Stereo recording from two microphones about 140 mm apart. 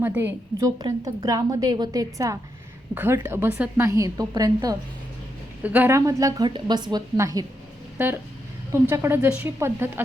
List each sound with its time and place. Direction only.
0.0 s a woman's voice: 15° right (ahead or behind)
0.6 s a woman's voice: 25° right (ahead or behind)
5.6 s a woman's voice: 10° right (ahead or behind)
6.1 s a woman's voice: 25° right (ahead or behind)